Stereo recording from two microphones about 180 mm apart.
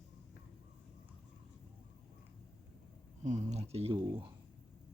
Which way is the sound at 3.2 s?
40° right (ahead or behind).